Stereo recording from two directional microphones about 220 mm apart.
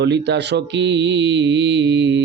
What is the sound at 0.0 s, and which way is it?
A man's voice, 50° right (ahead or behind).